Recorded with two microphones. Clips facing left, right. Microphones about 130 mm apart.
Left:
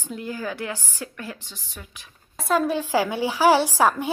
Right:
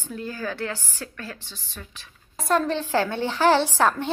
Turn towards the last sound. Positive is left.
turn(degrees=10)  # may be behind; listen again after turning